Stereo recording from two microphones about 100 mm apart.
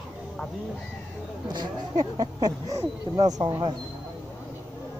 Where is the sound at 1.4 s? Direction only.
45° right (ahead or behind).